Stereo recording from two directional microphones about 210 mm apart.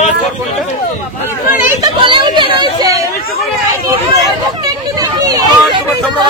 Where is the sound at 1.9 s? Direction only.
25° right (ahead or behind).